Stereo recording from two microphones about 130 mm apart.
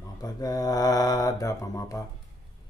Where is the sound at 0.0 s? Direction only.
30° left (ahead or behind).